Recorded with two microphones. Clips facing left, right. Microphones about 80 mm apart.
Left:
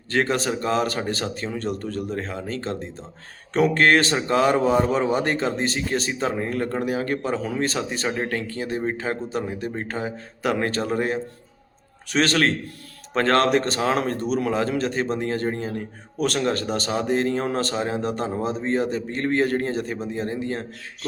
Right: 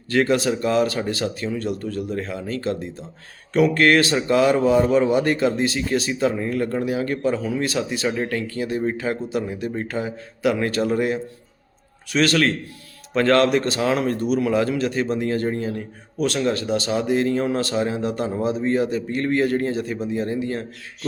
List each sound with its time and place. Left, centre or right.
0.1 s a man's voice: left